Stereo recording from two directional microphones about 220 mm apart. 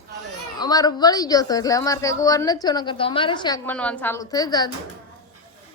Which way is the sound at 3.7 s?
5° left (ahead or behind).